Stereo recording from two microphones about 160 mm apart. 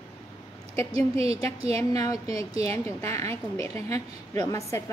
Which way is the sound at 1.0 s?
40° right (ahead or behind).